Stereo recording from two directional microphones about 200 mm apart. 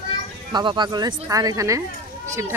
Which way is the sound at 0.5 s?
20° right (ahead or behind).